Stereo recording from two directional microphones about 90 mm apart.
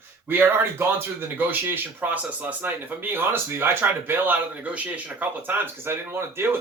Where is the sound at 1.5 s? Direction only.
20° right (ahead or behind).